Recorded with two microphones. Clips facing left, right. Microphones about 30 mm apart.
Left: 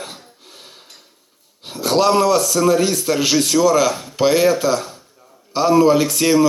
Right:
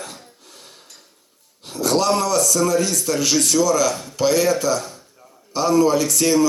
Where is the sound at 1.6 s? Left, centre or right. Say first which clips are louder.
Left 3 dB; left.